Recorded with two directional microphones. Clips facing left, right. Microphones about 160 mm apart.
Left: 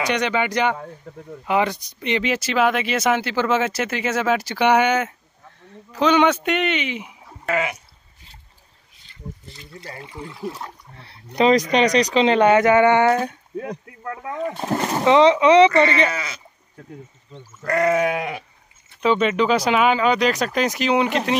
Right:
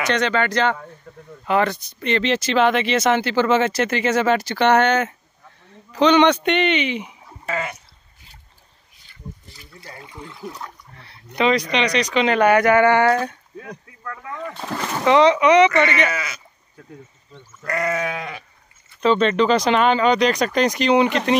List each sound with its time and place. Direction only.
0.0 s speech: 15° left (ahead or behind)
9.9 s speech: 5° left (ahead or behind)
10.3 s speech: 30° left (ahead or behind)
15.0 s speech: 20° left (ahead or behind)
17.6 s speech: 20° left (ahead or behind); by 21.2 s 5° left (ahead or behind)